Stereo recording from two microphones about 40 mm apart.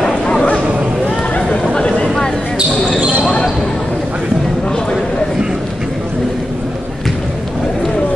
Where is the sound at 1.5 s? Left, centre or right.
Left.